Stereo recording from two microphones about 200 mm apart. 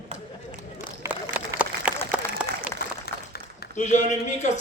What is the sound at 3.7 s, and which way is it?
Speech, 35° left (ahead or behind).